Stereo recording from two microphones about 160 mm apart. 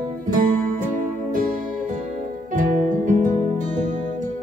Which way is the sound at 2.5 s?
55° right (ahead or behind).